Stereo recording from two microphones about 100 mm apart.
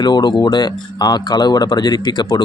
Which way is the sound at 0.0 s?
45° left (ahead or behind).